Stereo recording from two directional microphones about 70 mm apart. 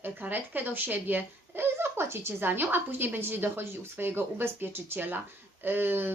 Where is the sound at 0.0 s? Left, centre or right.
Right.